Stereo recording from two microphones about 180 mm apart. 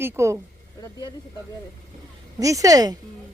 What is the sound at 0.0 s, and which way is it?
Speech, 15° right (ahead or behind).